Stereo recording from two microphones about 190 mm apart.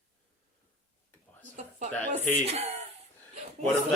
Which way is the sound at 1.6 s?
40° right (ahead or behind).